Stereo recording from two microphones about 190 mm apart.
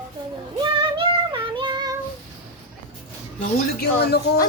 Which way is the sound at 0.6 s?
25° right (ahead or behind).